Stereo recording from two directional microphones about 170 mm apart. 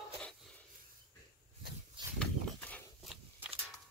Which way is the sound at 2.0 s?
30° right (ahead or behind).